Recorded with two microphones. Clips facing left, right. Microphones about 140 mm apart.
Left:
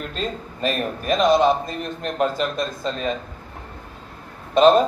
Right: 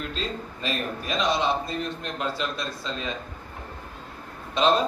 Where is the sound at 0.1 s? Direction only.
50° left (ahead or behind).